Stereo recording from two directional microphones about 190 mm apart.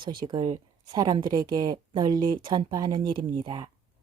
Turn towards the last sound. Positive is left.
turn(degrees=-20)  # may be behind; listen again after turning